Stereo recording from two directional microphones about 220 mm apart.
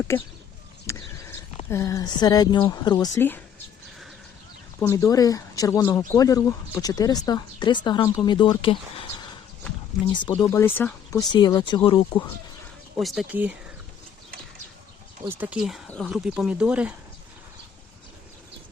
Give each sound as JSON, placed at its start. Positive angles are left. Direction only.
{"t": 0.9, "sound": "a sound", "side_deg": 15}
{"t": 1.7, "sound": "speech", "side_deg": 15}
{"t": 4.8, "sound": "speech", "side_deg": 10}
{"t": 10.1, "sound": "speech", "side_deg": 20}
{"t": 13.0, "sound": "speech", "side_deg": 0}
{"t": 15.3, "sound": "speech", "side_deg": -5}